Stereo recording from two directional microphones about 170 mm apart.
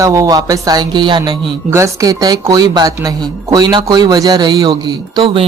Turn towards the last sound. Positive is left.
turn(degrees=-30)  # may be behind; listen again after turning